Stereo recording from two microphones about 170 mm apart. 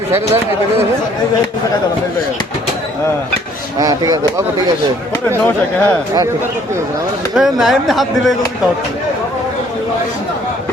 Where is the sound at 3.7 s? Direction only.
20° right (ahead or behind).